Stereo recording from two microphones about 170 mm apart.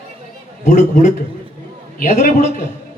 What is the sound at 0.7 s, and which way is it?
A man's voice, 50° left (ahead or behind).